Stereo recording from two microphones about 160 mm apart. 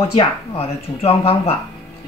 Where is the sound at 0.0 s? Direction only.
40° left (ahead or behind).